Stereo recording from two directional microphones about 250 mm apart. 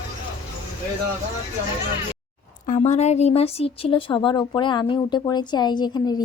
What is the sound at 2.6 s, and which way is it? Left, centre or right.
Speech, left.